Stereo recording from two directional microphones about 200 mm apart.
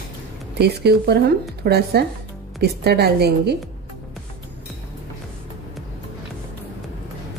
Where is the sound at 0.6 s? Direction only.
55° right (ahead or behind).